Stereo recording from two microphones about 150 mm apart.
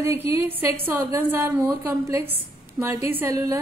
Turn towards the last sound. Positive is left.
turn(degrees=-20)  # may be behind; listen again after turning